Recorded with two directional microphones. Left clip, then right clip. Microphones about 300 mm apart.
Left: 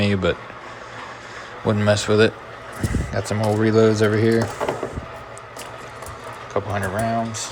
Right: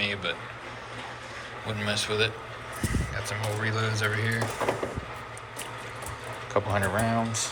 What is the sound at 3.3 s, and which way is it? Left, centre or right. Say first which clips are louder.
Speech: left 12 dB; left.